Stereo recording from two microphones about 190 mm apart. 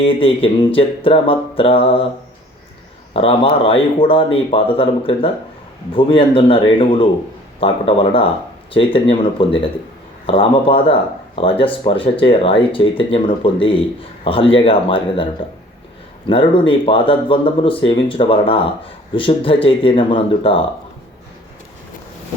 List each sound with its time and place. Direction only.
0.0 s speech: 30° left (ahead or behind)
3.1 s speech: 30° left (ahead or behind)
10.2 s speech: 30° left (ahead or behind)